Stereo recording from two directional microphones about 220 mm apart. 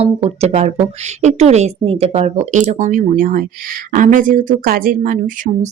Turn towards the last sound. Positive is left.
turn(degrees=-35)  # may be behind; listen again after turning